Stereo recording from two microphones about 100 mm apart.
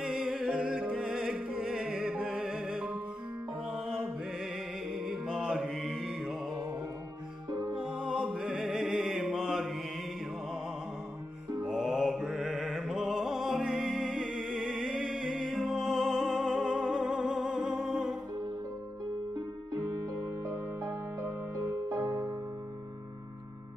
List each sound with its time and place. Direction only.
0.0 s music: 5° right (ahead or behind)
7.8 s music: 10° right (ahead or behind)
11.6 s music: centre (ahead or behind)
19.3 s music: 35° right (ahead or behind)